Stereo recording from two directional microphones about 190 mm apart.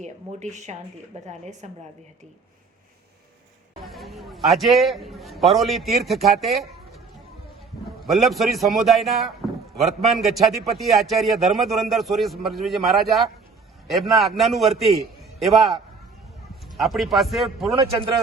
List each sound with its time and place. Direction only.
0.0 s speech: 35° right (ahead or behind)
3.8 s a man's voice: centre (ahead or behind)
8.0 s a man's voice: centre (ahead or behind)